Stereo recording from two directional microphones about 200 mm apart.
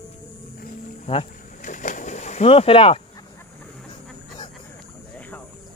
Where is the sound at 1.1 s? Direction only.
35° left (ahead or behind).